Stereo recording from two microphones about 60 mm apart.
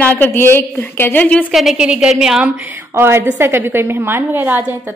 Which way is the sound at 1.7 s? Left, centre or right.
Centre.